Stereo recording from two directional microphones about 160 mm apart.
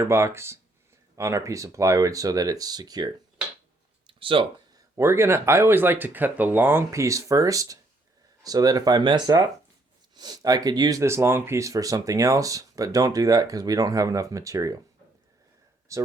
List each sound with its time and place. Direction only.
0.0 s speech: 15° right (ahead or behind)
4.0 s a sound: 35° right (ahead or behind)
4.9 s speech: 15° right (ahead or behind)
15.9 s speech: 20° right (ahead or behind)